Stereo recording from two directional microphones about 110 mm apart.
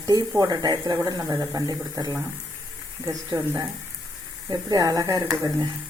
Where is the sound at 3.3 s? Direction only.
35° right (ahead or behind).